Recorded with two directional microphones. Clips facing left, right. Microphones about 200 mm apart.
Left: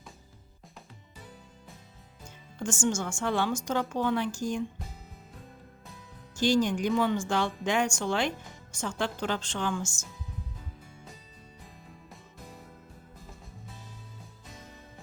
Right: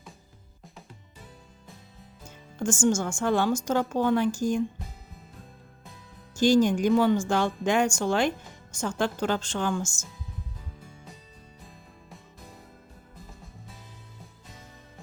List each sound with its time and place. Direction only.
2.6 s speech: 45° right (ahead or behind)
6.3 s speech: 45° right (ahead or behind)